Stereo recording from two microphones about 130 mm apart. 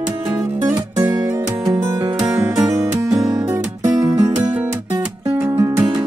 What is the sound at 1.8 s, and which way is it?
Music, 20° right (ahead or behind).